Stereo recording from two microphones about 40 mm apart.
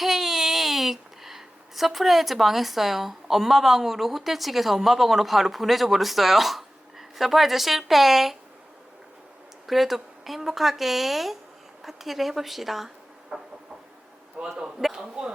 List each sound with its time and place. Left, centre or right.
0.0 s speech: centre
9.6 s speech: centre
13.3 s a sound: centre
14.4 s a man's voice: right